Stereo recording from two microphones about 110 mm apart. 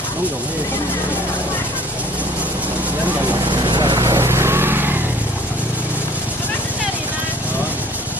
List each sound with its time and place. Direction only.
3.6 s vehicle: 45° right (ahead or behind); by 4.9 s 20° right (ahead or behind)